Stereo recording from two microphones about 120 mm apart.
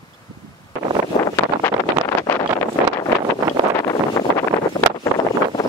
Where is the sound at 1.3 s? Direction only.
20° left (ahead or behind).